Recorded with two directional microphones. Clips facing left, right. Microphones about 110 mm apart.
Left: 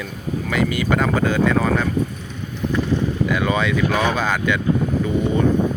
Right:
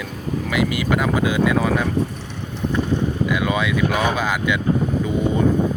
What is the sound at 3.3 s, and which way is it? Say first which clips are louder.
Speech: left 2 dB; 10° right (ahead or behind).